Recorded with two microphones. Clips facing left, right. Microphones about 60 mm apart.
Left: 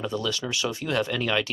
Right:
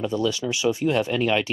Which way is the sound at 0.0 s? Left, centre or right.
Right.